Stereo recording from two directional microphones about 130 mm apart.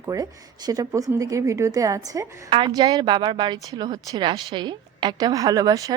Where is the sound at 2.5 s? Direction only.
35° right (ahead or behind).